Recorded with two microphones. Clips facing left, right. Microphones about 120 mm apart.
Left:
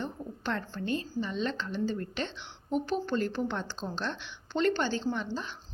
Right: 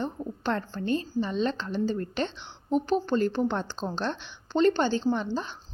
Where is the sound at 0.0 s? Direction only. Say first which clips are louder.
Right 5 dB; 35° right (ahead or behind).